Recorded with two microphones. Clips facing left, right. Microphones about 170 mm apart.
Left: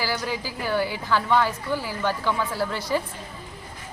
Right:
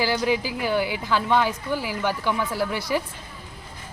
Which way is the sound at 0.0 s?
20° right (ahead or behind).